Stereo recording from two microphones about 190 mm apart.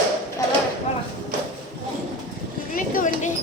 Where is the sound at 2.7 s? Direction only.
45° left (ahead or behind).